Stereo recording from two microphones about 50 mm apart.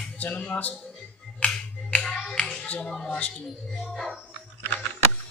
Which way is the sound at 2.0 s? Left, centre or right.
Centre.